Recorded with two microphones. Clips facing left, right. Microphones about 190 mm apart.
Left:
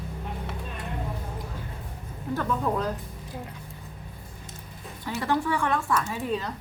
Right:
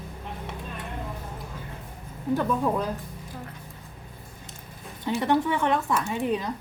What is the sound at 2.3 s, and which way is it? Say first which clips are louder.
Speech: right 3 dB; 10° right (ahead or behind).